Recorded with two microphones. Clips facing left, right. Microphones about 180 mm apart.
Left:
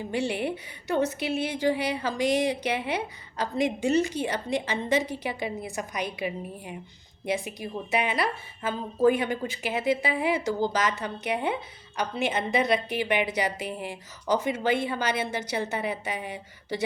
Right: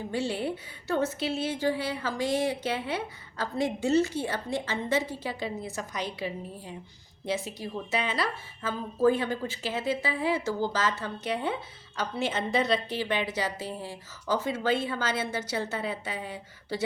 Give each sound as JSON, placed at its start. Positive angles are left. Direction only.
{"t": 0.1, "sound": "a woman's voice", "side_deg": 15}